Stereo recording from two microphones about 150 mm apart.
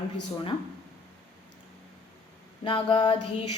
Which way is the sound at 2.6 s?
35° left (ahead or behind).